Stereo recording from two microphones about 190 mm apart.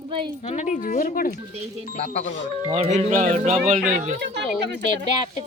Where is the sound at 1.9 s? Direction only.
35° left (ahead or behind).